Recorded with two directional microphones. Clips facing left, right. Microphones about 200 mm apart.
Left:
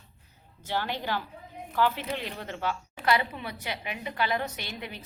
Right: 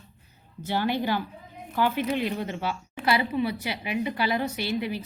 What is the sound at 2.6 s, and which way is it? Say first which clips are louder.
A woman's voice: right 1 dB; centre (ahead or behind).